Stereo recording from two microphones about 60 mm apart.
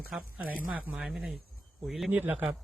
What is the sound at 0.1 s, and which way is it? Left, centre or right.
Speech, centre.